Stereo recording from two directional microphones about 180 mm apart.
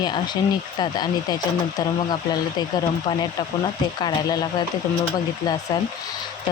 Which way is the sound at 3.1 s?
25° left (ahead or behind).